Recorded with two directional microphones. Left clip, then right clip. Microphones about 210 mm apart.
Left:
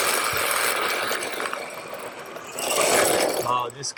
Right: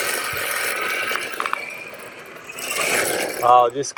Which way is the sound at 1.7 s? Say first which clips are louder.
Right 1 dB; 30° left (ahead or behind).